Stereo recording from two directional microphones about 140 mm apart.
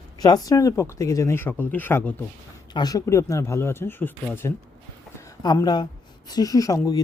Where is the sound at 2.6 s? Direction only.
30° left (ahead or behind).